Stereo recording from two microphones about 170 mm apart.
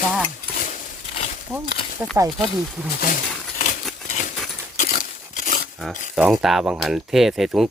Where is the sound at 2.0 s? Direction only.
15° right (ahead or behind).